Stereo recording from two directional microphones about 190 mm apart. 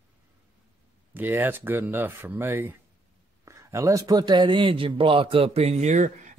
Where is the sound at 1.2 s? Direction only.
10° right (ahead or behind).